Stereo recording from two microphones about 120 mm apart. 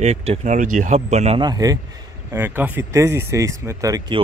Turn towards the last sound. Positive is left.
turn(degrees=-30)  # may be behind; listen again after turning